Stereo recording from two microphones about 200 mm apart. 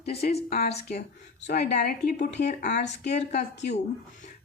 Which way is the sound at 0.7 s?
35° left (ahead or behind).